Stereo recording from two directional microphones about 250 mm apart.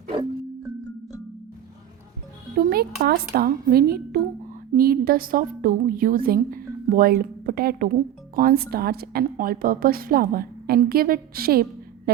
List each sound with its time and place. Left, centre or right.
2.6 s a woman's voice: right